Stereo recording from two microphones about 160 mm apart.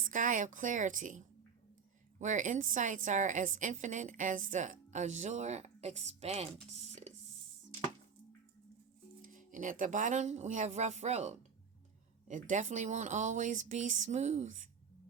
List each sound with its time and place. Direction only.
0.0 s a woman's voice: 55° right (ahead or behind)
6.7 s a sound: 45° right (ahead or behind)
9.2 s a woman's voice: 55° right (ahead or behind)